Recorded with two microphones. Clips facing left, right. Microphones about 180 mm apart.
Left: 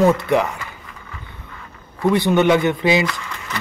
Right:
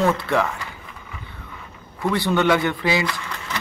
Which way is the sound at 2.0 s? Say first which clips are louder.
Left 4 dB; 20° left (ahead or behind).